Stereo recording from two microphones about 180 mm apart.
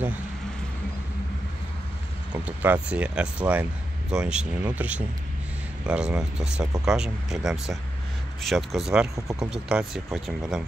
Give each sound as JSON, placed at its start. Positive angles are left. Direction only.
{"t": 2.3, "sound": "speech", "side_deg": -10}